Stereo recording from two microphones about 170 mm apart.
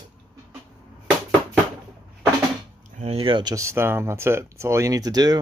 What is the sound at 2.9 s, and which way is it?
Speech, 35° right (ahead or behind).